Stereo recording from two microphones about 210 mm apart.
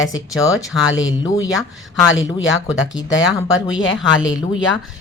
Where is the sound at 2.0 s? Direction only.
65° left (ahead or behind).